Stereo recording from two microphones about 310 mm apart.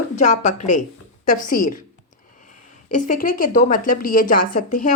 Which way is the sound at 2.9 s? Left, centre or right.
Left.